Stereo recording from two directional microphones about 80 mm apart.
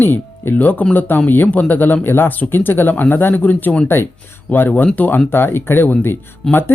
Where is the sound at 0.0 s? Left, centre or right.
Left.